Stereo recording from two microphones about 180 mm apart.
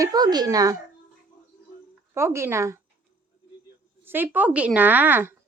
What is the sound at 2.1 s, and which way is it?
Speech, 15° right (ahead or behind).